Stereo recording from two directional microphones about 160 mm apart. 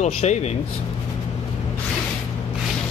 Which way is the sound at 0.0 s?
45° left (ahead or behind).